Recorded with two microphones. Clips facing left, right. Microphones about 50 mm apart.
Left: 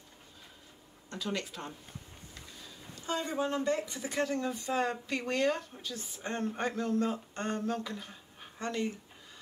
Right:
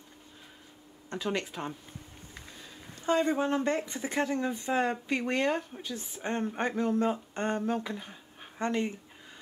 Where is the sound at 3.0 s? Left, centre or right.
Right.